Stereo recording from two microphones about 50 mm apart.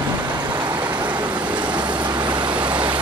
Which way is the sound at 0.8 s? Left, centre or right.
Right.